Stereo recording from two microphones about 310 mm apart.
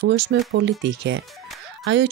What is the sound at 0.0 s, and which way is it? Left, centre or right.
Speech, right.